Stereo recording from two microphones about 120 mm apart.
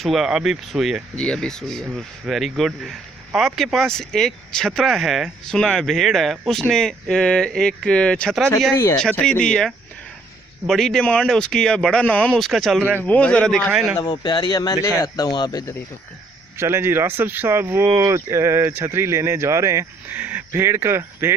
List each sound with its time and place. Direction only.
0.0 s speech: 5° right (ahead or behind)
1.1 s speech: 10° left (ahead or behind)
8.7 s speech: 20° left (ahead or behind)
9.0 s speech: 5° left (ahead or behind)
14.0 s speech: 35° left (ahead or behind)
16.6 s speech: 20° right (ahead or behind)